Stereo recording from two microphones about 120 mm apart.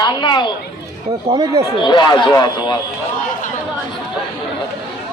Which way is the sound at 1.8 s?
40° left (ahead or behind).